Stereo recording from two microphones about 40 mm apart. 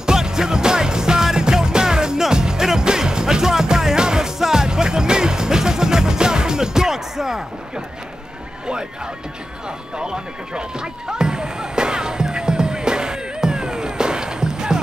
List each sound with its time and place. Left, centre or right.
0.0 s music: centre
8.6 s speech: centre
9.9 s basketball bounce: right